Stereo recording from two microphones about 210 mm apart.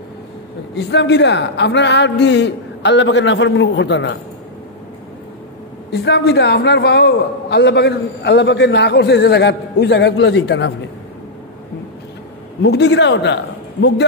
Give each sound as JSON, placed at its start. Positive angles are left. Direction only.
{"t": 0.7, "sound": "a man's voice", "side_deg": 55}
{"t": 5.9, "sound": "a man's voice", "side_deg": 55}
{"t": 12.6, "sound": "a man's voice", "side_deg": 55}